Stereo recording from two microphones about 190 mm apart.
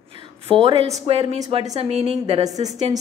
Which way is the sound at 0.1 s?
30° right (ahead or behind).